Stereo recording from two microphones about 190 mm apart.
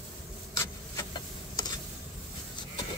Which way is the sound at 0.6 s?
20° left (ahead or behind).